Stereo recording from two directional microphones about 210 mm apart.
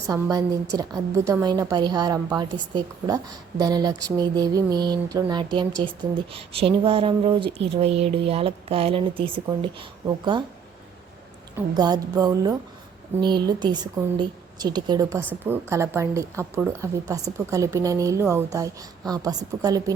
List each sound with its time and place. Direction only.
0.1 s a woman's voice: 15° right (ahead or behind)
11.7 s a woman's voice: 20° right (ahead or behind)